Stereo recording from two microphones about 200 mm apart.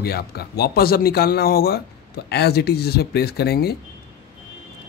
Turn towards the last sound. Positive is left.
turn(degrees=55)  # may be behind; listen again after turning